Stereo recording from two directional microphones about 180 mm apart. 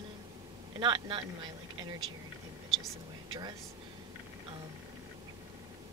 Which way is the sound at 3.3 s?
25° right (ahead or behind).